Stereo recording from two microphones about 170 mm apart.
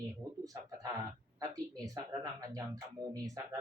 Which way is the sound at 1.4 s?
20° right (ahead or behind).